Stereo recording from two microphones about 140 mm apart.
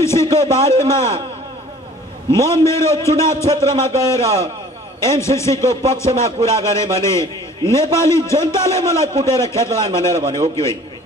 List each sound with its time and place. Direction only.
0.0 s a man's voice: 20° left (ahead or behind)
2.3 s a man's voice: 20° left (ahead or behind)
10.2 s a man's voice: 45° right (ahead or behind)
10.5 s a man's voice: 20° left (ahead or behind)